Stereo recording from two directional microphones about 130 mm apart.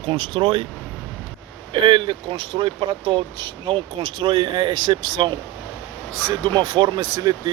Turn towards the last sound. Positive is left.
turn(degrees=-30)  # may be behind; listen again after turning